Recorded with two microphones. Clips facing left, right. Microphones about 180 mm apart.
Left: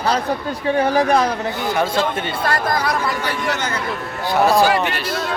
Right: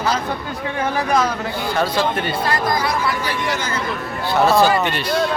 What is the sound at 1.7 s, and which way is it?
Speech, 20° left (ahead or behind).